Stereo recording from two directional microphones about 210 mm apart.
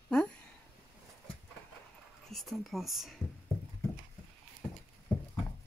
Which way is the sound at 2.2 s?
Centre (ahead or behind).